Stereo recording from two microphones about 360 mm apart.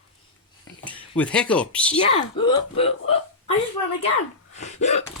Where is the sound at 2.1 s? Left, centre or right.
Centre.